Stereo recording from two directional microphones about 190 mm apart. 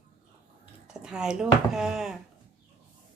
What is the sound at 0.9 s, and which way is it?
Speech, 5° right (ahead or behind).